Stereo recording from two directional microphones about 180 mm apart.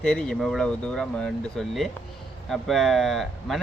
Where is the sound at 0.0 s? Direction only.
5° left (ahead or behind).